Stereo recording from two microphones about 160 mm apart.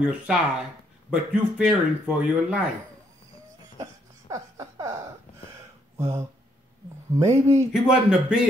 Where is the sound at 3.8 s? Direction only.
20° right (ahead or behind).